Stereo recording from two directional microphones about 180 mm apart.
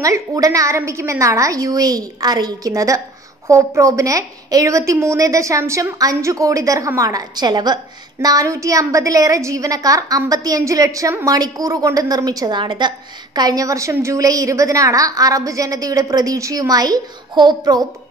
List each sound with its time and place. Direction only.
0.0 s a woman's voice: 15° right (ahead or behind)